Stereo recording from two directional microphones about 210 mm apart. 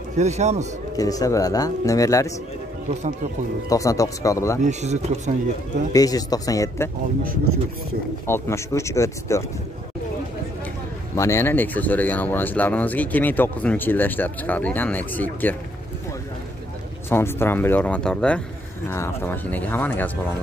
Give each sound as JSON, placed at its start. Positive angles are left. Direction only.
{"t": 0.2, "sound": "speech", "side_deg": -35}
{"t": 0.9, "sound": "speech", "side_deg": 15}
{"t": 3.6, "sound": "speech", "side_deg": 15}
{"t": 4.6, "sound": "speech", "side_deg": -35}
{"t": 5.9, "sound": "speech", "side_deg": 15}
{"t": 8.3, "sound": "speech", "side_deg": 15}
{"t": 11.1, "sound": "speech", "side_deg": 15}
{"t": 17.1, "sound": "speech", "side_deg": 10}